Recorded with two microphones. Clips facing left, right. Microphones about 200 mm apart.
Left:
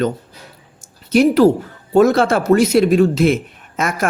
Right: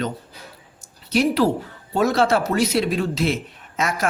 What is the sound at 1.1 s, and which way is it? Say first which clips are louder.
Speech: left 7 dB; 50° left (ahead or behind).